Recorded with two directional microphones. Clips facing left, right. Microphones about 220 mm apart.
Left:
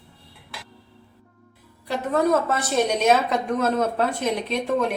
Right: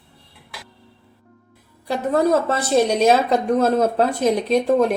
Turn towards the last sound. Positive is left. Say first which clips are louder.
# right 7 dB
turn(degrees=-40)  # may be behind; listen again after turning